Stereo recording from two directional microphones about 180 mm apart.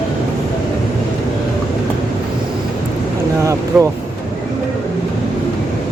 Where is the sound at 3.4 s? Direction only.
15° right (ahead or behind).